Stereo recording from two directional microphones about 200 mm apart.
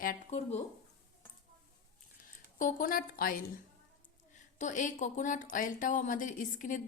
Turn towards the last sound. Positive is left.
turn(degrees=40)  # may be behind; listen again after turning